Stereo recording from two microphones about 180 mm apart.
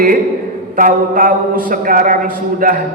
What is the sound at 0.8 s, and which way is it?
A man's voice, 50° right (ahead or behind).